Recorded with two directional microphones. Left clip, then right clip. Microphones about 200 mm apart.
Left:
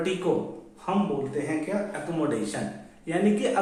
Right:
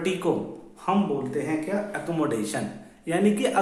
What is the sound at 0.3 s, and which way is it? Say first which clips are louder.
A man's voice: even; 45° right (ahead or behind).